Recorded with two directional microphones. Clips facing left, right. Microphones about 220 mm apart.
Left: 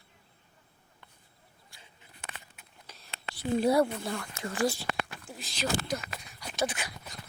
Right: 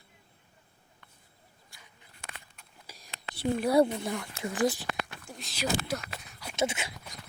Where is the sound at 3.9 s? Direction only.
15° right (ahead or behind).